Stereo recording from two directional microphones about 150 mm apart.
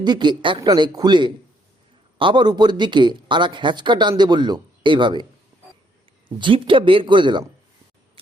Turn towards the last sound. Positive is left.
turn(degrees=-30)  # may be behind; listen again after turning